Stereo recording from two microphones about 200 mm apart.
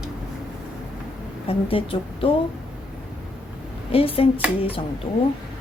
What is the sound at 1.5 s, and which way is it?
Speech, 25° left (ahead or behind).